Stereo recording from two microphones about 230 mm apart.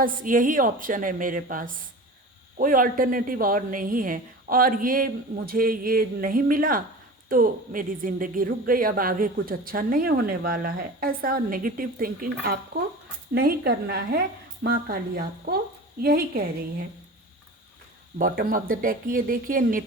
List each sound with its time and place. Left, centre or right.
0.0 s a woman's voice: right
18.2 s speech: right